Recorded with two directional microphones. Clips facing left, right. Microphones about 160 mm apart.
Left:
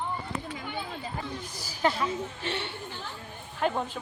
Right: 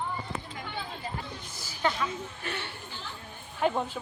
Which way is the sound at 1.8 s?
30° left (ahead or behind).